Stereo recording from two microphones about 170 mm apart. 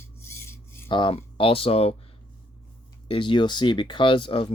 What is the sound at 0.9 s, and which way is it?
Speech, 30° left (ahead or behind).